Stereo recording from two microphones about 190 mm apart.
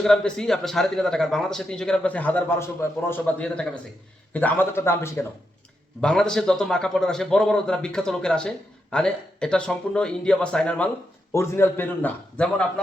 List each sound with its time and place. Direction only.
0.0 s a man's voice: 5° left (ahead or behind)